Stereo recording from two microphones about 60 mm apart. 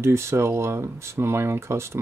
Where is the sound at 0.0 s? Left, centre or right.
Right.